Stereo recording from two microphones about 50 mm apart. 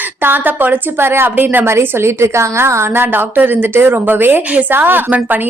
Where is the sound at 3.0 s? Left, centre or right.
Right.